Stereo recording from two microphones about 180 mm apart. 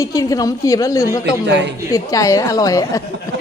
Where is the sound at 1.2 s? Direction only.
75° right (ahead or behind).